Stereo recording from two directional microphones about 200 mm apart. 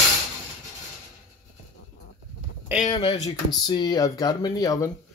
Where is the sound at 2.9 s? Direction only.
25° left (ahead or behind).